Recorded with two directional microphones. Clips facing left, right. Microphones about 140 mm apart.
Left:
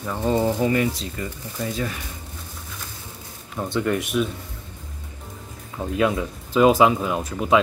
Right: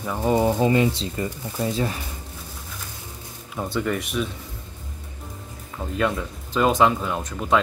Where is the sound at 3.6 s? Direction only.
Centre (ahead or behind).